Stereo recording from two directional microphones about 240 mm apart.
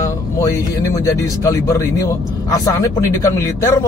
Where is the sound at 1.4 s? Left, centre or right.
Centre.